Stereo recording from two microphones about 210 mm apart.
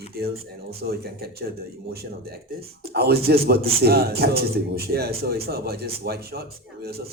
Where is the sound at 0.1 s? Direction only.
45° right (ahead or behind).